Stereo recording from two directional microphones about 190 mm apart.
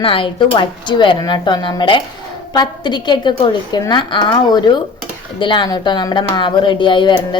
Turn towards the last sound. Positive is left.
turn(degrees=25)  # may be behind; listen again after turning